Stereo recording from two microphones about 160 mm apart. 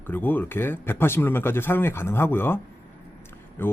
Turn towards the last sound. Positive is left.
turn(degrees=15)  # may be behind; listen again after turning